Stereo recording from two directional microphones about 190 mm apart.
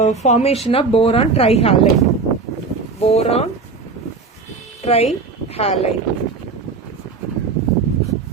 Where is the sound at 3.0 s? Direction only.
35° left (ahead or behind).